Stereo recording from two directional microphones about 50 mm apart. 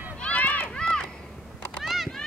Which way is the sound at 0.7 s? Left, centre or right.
Centre.